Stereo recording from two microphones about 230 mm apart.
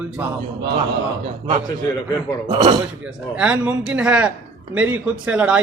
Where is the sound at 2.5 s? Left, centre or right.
Right.